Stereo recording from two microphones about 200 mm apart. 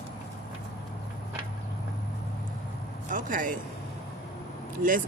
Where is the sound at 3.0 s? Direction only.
40° right (ahead or behind).